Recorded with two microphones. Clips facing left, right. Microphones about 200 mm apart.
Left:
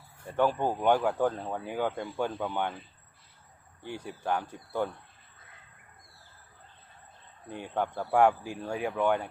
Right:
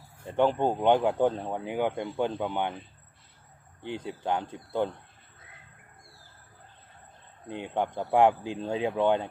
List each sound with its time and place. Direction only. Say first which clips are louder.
0.3 s speech: right 3 dB; 20° right (ahead or behind)
3.8 s speech: right 2 dB; 20° right (ahead or behind)
7.4 s speech: right 2 dB; 20° right (ahead or behind)